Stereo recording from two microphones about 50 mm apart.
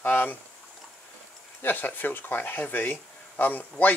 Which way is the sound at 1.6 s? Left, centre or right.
Left.